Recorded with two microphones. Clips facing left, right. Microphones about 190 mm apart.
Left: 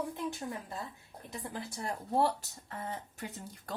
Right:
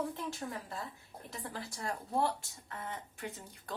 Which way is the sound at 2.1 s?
35° left (ahead or behind).